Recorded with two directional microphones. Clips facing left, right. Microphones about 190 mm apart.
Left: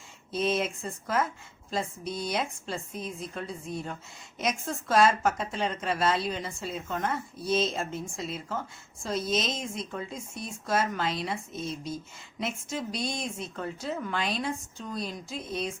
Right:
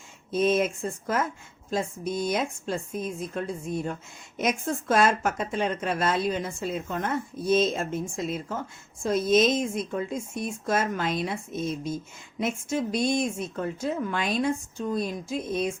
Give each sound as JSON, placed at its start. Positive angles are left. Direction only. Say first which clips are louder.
{"t": 0.3, "sound": "speech", "louder": "right 5 dB", "side_deg": -50}